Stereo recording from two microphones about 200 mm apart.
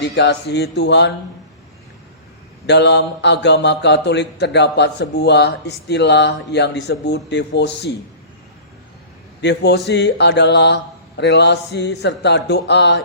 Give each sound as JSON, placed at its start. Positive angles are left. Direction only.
{"t": 0.0, "sound": "speech", "side_deg": 60}
{"t": 2.6, "sound": "speech", "side_deg": 60}
{"t": 9.4, "sound": "speech", "side_deg": 60}